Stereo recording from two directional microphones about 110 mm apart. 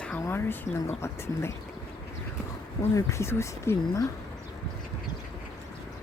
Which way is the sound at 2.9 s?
25° left (ahead or behind).